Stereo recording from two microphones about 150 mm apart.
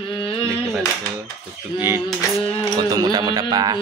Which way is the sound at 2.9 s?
25° right (ahead or behind).